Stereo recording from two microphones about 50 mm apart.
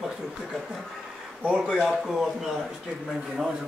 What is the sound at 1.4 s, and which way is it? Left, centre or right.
Speech, right.